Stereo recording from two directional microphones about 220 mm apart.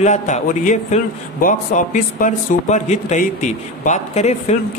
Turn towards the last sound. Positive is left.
turn(degrees=30)  # may be behind; listen again after turning